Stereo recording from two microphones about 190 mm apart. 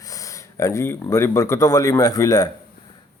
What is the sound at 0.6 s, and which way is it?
Speech, 15° left (ahead or behind).